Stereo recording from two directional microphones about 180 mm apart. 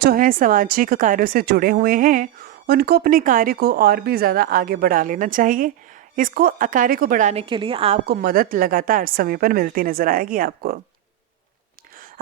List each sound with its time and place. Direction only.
0.0 s speech: 50° right (ahead or behind)
7.4 s a woman's voice: 30° right (ahead or behind)
8.0 s speech: 60° right (ahead or behind)